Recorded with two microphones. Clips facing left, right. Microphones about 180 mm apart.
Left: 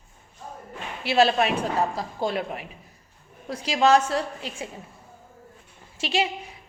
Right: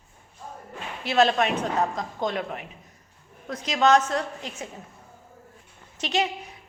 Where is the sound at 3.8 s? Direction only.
30° left (ahead or behind).